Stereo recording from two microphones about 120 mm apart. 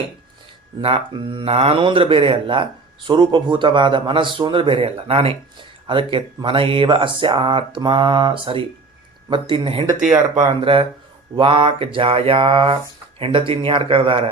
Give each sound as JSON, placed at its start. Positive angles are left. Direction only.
{"t": 0.8, "sound": "speech", "side_deg": -45}
{"t": 10.0, "sound": "speech", "side_deg": -90}
{"t": 10.4, "sound": "speech", "side_deg": -50}